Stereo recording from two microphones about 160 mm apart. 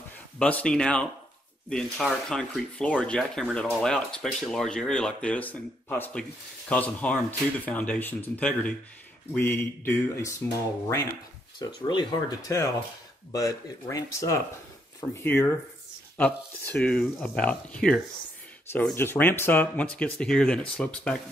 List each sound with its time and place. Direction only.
0.4 s speech: 10° left (ahead or behind)
11.6 s speech: 30° left (ahead or behind); by 21.2 s 5° left (ahead or behind)